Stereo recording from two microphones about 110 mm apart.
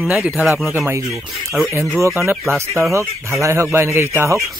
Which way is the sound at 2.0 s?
20° right (ahead or behind).